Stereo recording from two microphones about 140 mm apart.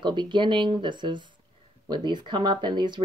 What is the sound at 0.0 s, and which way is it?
Speech, 35° right (ahead or behind).